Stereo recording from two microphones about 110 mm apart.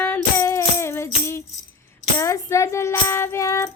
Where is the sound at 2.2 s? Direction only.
30° left (ahead or behind).